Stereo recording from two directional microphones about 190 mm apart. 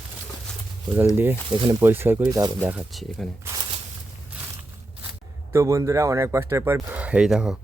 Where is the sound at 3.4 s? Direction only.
20° right (ahead or behind).